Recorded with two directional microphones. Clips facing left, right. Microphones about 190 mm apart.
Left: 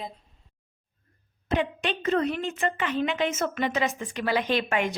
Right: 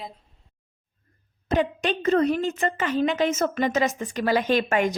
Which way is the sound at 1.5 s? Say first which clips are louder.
Right 4 dB; 40° right (ahead or behind).